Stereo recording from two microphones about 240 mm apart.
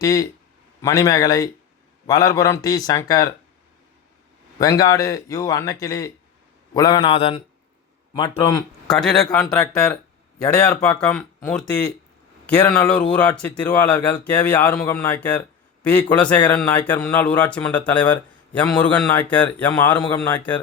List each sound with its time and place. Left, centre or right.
0.0 s speech: centre
4.6 s speech: centre
6.7 s mantra: centre
8.1 s speech: centre
8.9 s a man's voice: centre
10.6 s a man's voice: centre
20.0 s speech: centre